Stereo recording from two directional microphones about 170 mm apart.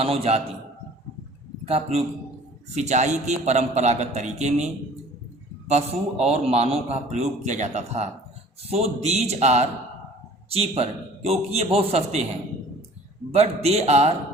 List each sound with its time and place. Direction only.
0.0 s a man's voice: 35° right (ahead or behind)
1.6 s a man's voice: 35° right (ahead or behind)
13.3 s a man's voice: 40° right (ahead or behind)